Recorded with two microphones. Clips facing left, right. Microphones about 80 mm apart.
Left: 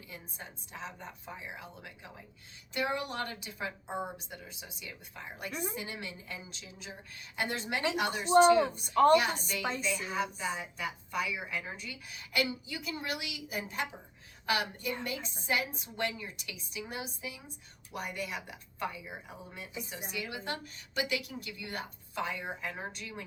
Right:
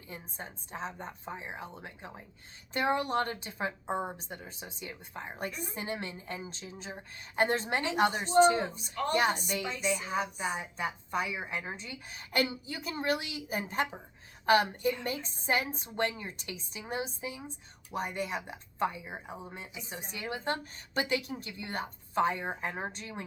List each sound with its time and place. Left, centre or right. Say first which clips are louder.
0.1 s a woman's voice: right 5 dB; right
5.5 s speech: left 3 dB; left
5.7 s a woman's voice: right 4 dB; right
8.7 s speech: left 10 dB; left
9.1 s a woman's voice: left 1 dB; right